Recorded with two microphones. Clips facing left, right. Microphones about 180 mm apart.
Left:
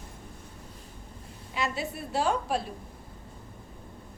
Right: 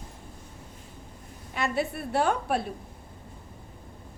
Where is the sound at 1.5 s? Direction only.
55° right (ahead or behind).